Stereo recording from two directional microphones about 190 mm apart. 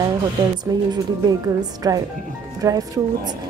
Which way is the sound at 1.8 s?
20° right (ahead or behind).